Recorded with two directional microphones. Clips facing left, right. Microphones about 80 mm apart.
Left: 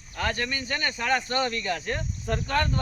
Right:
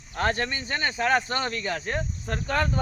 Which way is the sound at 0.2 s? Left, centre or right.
Right.